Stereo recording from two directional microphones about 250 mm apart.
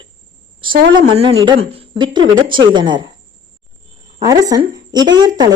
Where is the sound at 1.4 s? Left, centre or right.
Right.